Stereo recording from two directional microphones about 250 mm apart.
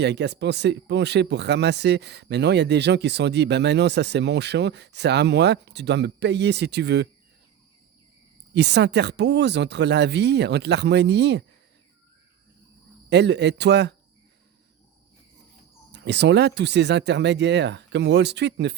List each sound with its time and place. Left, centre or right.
0.0 s speech: right
8.5 s speech: right
13.1 s speech: right
15.9 s speech: right